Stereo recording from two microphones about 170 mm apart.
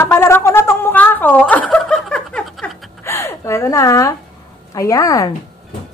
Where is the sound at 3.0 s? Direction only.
15° left (ahead or behind).